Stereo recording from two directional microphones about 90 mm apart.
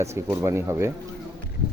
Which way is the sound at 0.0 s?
30° right (ahead or behind).